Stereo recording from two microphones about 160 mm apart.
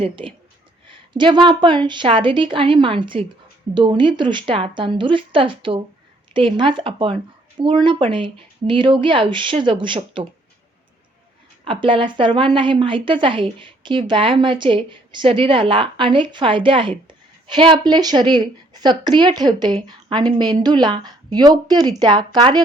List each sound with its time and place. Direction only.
0.0 s a woman's voice: 30° right (ahead or behind)
11.6 s a woman's voice: 30° right (ahead or behind)